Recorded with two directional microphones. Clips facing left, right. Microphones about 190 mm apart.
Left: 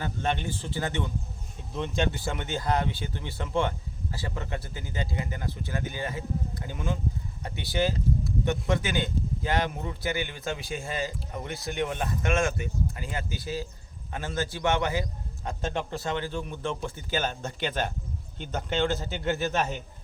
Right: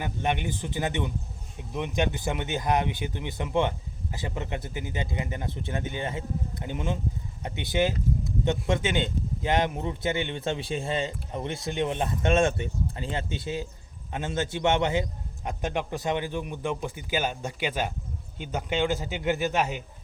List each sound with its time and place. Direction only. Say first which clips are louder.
0.0 s speech: right 1 dB; 15° right (ahead or behind)